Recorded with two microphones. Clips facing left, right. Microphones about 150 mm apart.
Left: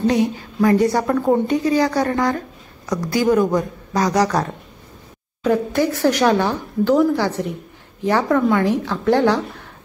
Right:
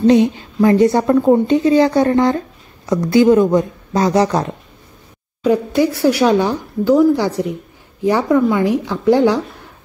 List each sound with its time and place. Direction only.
0.0 s a woman's voice: 25° right (ahead or behind)
5.4 s speech: 10° right (ahead or behind)